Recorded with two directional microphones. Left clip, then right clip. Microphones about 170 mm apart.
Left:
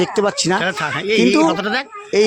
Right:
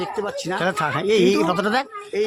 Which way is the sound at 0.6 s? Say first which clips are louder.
Left 2 dB; 10° right (ahead or behind).